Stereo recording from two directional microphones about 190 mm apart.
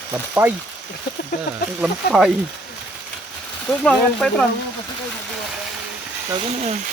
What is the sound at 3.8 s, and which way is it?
Speech, 5° left (ahead or behind).